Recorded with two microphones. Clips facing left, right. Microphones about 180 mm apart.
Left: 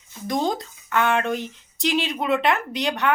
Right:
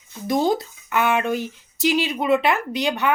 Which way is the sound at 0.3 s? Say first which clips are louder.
Right 4 dB; 5° right (ahead or behind).